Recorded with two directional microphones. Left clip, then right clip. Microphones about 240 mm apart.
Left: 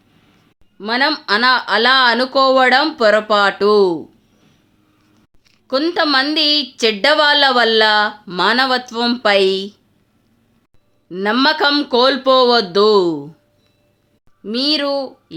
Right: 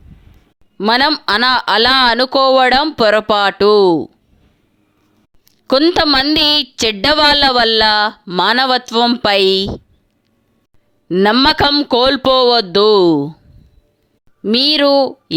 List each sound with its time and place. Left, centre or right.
0.8 s a woman's voice: right
5.6 s a woman's voice: right
11.1 s a woman's voice: right
14.4 s a woman's voice: right